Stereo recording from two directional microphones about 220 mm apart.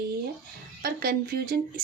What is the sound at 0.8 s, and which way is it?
Speech, 40° right (ahead or behind).